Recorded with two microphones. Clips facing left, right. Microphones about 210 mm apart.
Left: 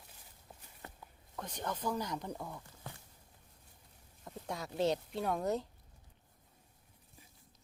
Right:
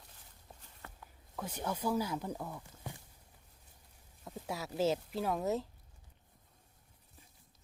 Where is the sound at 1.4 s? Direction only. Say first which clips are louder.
Right 2 dB; 5° right (ahead or behind).